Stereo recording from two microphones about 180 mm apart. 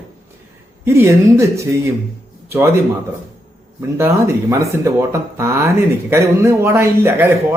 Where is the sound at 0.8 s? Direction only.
15° right (ahead or behind).